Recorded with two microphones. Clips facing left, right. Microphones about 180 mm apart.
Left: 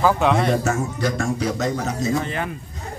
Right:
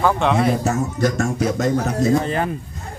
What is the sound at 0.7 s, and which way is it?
Speech, 45° right (ahead or behind).